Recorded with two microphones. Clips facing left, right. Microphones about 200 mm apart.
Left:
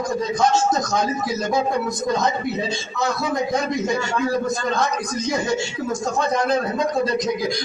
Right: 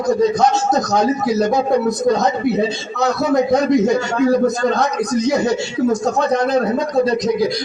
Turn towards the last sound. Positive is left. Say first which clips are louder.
# right 4 dB
turn(degrees=-40)  # may be behind; listen again after turning